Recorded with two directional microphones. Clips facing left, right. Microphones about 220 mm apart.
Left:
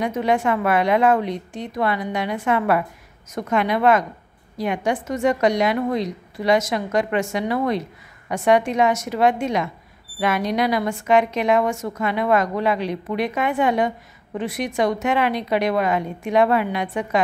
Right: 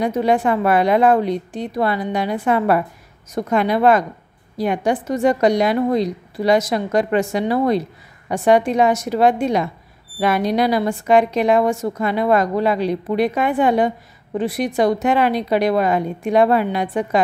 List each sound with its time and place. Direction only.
0.0 s a woman's voice: 35° right (ahead or behind)